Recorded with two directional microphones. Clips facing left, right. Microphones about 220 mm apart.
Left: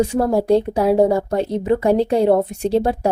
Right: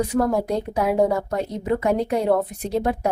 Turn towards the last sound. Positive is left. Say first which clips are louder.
# left 5 dB
turn(degrees=30)  # may be behind; listen again after turning